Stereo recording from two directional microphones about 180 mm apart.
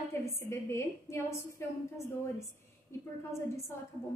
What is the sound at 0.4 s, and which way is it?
A woman's voice, 15° left (ahead or behind).